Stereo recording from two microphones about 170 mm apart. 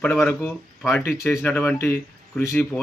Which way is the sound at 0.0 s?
10° left (ahead or behind).